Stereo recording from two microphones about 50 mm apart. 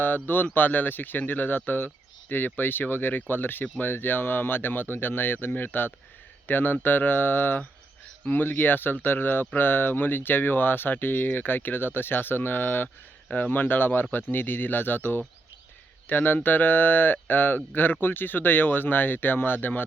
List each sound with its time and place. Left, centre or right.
0.0 s speech: left